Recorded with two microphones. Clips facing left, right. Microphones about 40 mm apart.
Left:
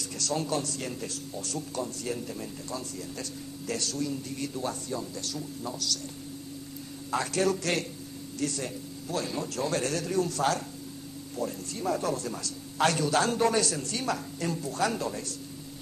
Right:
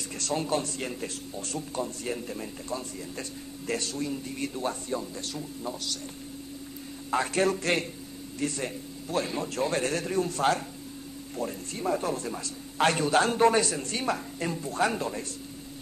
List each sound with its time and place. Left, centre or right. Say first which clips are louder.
0.2 s a man's voice: right 1 dB; right
7.1 s a man's voice: right 2 dB; right